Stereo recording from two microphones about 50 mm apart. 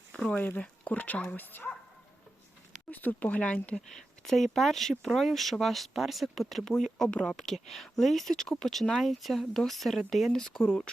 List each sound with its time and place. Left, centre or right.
0.3 s speech: left
2.9 s speech: left
3.8 s speech: centre